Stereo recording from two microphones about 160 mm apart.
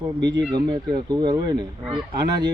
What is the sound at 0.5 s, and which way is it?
Speech, 25° right (ahead or behind).